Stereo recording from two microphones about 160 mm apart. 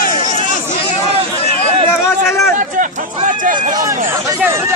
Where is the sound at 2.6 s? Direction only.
50° right (ahead or behind).